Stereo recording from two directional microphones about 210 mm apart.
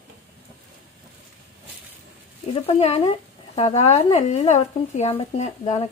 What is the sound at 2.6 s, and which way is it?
Speech, 30° left (ahead or behind).